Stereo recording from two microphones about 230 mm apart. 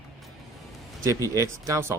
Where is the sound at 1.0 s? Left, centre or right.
Centre.